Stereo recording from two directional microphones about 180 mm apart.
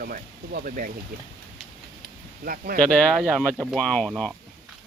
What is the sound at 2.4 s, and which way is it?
Speech, 55° right (ahead or behind).